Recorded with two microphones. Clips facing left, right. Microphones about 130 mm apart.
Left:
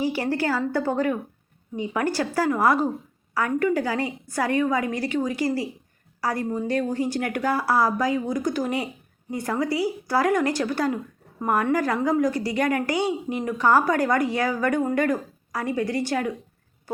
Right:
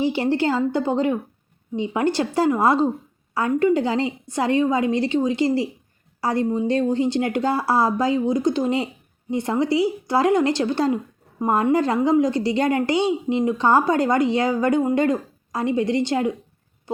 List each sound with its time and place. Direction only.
0.0 s speech: 25° right (ahead or behind)